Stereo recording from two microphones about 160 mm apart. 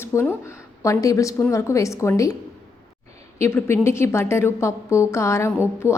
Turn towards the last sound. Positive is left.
turn(degrees=15)  # may be behind; listen again after turning